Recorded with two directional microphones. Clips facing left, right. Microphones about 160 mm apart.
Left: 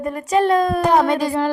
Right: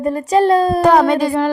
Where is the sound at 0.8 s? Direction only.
85° right.